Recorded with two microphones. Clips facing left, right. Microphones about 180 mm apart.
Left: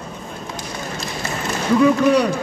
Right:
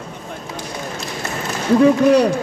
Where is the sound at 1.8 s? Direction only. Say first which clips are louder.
Right 3 dB; 35° right (ahead or behind).